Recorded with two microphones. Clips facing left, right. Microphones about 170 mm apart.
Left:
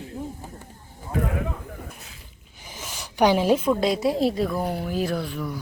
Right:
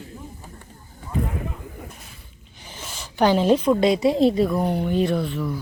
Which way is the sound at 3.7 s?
Centre (ahead or behind).